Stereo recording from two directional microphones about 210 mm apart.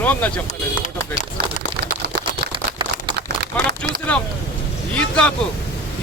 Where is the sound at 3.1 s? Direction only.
50° right (ahead or behind).